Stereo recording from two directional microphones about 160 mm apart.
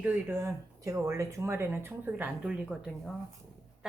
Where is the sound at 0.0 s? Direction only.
15° right (ahead or behind).